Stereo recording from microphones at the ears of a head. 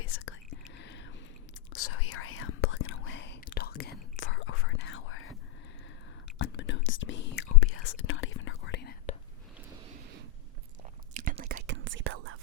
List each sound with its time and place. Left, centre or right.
0.0 s whispering: left
6.4 s whispering: left
9.8 s a sound: right
11.1 s whispering: right